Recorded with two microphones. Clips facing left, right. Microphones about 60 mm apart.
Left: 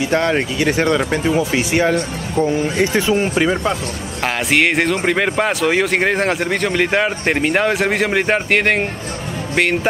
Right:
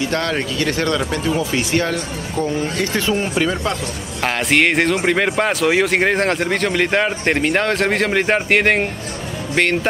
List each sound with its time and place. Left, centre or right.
0.1 s speech: centre
3.3 s speech: centre
4.2 s speech: centre